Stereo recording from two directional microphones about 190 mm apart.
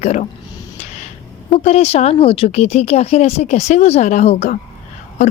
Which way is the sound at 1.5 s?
35° left (ahead or behind).